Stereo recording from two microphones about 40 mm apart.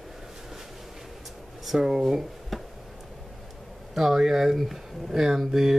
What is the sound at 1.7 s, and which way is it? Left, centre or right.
Speech, centre.